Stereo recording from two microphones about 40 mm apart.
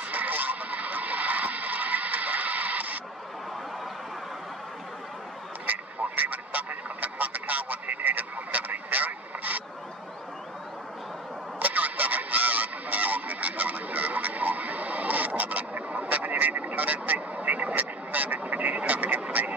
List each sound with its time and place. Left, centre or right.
0.1 s vehicle: right
5.7 s vehicle: right
11.6 s honk: right
19.2 s vehicle: right